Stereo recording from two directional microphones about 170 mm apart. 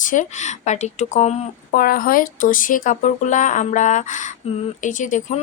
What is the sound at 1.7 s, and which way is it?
Speech, 60° left (ahead or behind).